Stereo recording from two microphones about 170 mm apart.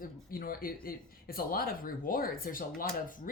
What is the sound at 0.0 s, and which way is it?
Speech, 60° left (ahead or behind).